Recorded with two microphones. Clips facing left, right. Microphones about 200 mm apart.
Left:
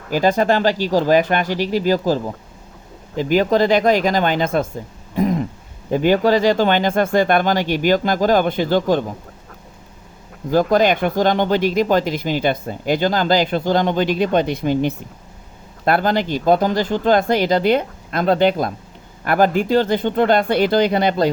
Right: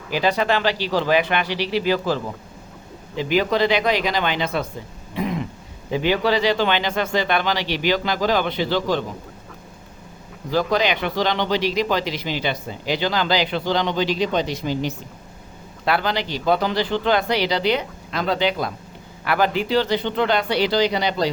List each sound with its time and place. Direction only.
0.1 s speech: 45° left (ahead or behind)
5.1 s throat clearing: 40° left (ahead or behind)
5.9 s speech: 45° left (ahead or behind)
10.5 s speech: 50° left (ahead or behind)